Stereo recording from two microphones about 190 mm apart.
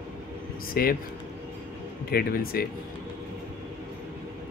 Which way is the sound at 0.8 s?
50° left (ahead or behind).